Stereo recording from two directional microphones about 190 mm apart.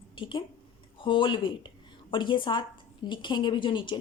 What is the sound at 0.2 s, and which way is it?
A woman's voice, 25° left (ahead or behind).